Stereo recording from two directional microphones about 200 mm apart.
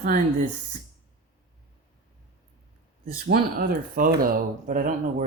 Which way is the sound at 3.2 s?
50° right (ahead or behind).